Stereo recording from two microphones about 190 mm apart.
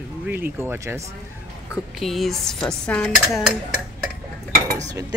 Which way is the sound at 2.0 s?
Centre (ahead or behind).